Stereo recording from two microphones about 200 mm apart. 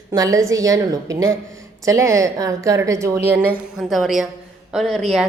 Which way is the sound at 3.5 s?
Centre (ahead or behind).